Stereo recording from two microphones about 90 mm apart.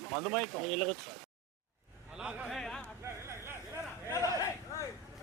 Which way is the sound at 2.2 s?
15° right (ahead or behind).